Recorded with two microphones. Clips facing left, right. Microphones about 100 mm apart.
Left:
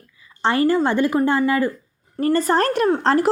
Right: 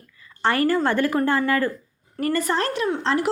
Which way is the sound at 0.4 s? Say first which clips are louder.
Left 2 dB; 20° left (ahead or behind).